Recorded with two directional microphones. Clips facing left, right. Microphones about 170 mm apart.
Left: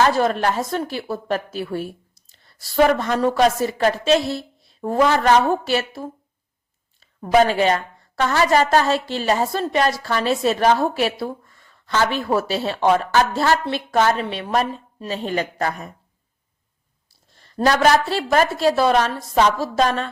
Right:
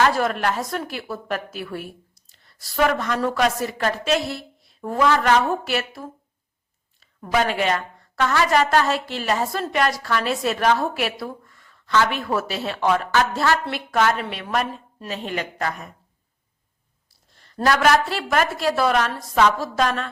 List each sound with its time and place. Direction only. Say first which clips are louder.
0.0 s a woman's voice: left 2 dB; 30° left (ahead or behind)
7.2 s a woman's voice: left 6 dB; 30° left (ahead or behind)
17.7 s a woman's voice: left 2 dB; 30° left (ahead or behind)